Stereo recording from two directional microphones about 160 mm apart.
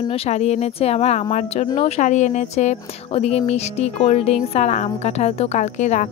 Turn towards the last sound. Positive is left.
turn(degrees=45)  # may be behind; listen again after turning